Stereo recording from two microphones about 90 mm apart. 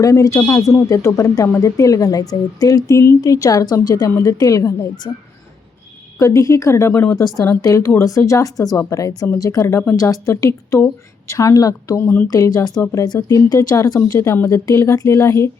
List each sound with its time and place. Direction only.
0.0 s a woman's voice: 35° left (ahead or behind)
6.1 s speech: 35° left (ahead or behind)
12.3 s a woman's voice: 40° left (ahead or behind)